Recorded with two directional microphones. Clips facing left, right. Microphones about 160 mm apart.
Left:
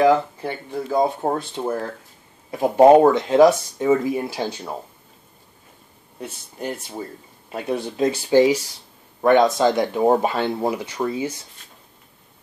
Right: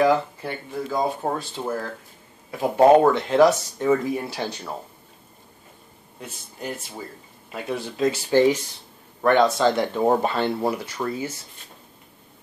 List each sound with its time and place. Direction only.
0.0 s speech: 20° left (ahead or behind)
2.5 s speech: 15° left (ahead or behind)
7.5 s speech: 25° left (ahead or behind)
8.3 s speech: 15° left (ahead or behind)